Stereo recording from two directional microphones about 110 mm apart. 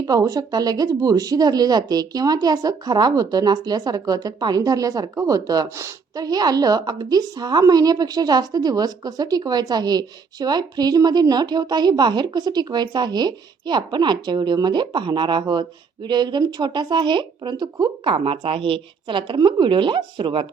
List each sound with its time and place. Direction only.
0.0 s speech: 35° right (ahead or behind); by 20.5 s 50° right (ahead or behind)